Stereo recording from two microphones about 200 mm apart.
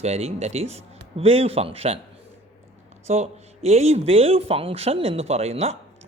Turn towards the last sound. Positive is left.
turn(degrees=-30)  # may be behind; listen again after turning